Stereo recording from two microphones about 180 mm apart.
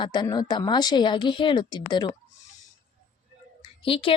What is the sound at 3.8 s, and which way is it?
Speech, 30° left (ahead or behind).